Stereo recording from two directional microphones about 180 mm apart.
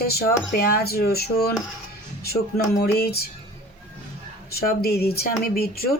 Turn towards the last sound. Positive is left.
turn(degrees=55)  # may be behind; listen again after turning